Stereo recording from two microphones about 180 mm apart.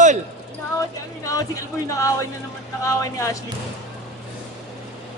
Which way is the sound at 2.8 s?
15° left (ahead or behind).